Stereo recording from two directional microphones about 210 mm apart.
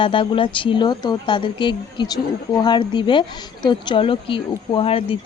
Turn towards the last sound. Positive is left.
turn(degrees=25)  # may be behind; listen again after turning